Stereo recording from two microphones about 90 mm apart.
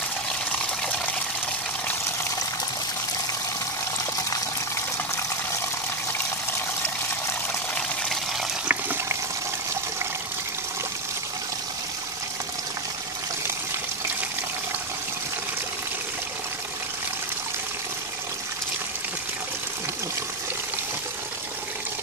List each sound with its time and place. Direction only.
4.0 s water: 35° left (ahead or behind)
8.0 s water: centre (ahead or behind)
8.6 s toilet flush: 20° right (ahead or behind)